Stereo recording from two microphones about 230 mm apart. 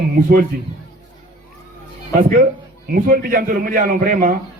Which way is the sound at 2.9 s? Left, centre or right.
Right.